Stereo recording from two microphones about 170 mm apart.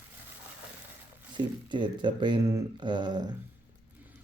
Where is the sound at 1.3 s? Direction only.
25° right (ahead or behind).